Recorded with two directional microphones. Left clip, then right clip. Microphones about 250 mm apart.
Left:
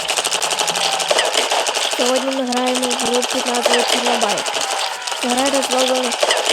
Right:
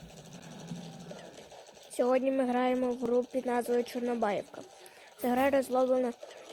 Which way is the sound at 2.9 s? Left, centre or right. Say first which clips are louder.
Left 12 dB; left.